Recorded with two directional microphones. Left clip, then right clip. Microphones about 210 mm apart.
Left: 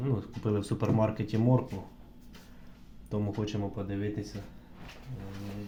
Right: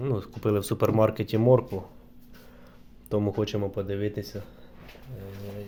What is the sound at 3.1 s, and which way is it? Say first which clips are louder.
Speech: right 8 dB; 40° right (ahead or behind).